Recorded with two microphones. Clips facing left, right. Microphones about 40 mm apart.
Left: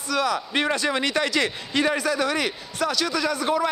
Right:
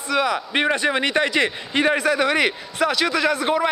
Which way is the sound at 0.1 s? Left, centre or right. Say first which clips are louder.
Right 3 dB; right.